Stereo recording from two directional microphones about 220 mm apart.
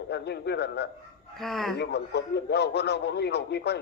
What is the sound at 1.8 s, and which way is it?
A man's voice, 50° left (ahead or behind).